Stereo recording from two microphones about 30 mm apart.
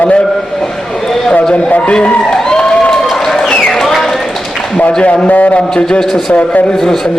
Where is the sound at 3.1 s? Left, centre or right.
Centre.